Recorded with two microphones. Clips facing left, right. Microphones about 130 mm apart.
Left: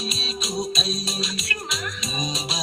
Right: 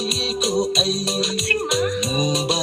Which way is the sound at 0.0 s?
70° right (ahead or behind).